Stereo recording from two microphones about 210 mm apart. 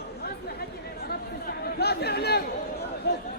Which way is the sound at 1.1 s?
50° left (ahead or behind).